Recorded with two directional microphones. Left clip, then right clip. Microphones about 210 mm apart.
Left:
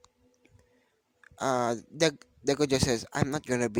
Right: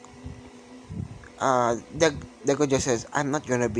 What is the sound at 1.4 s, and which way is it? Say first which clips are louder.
Speech: right 6 dB; 50° left (ahead or behind).